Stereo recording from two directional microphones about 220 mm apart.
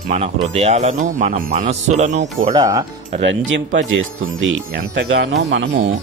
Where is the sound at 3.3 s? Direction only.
55° right (ahead or behind).